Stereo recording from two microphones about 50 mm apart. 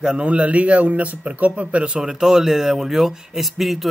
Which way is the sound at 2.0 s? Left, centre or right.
Centre.